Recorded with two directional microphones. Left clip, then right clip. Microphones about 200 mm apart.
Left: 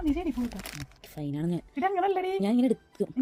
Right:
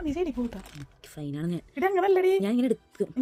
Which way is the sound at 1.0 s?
10° right (ahead or behind).